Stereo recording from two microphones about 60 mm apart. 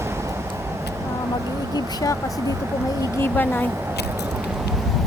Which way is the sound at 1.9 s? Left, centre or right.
Left.